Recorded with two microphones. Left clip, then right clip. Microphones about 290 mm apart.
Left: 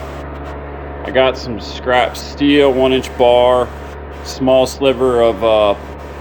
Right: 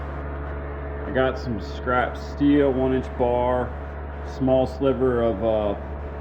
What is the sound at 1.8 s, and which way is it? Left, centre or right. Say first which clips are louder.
Speech: left 9 dB; centre.